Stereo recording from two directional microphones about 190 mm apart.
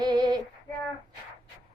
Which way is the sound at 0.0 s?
20° right (ahead or behind).